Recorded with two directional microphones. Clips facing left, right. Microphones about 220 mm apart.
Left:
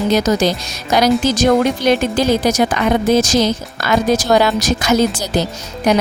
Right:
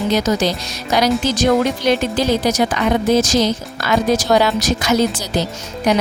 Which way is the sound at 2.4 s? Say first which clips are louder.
Left 2 dB; 50° left (ahead or behind).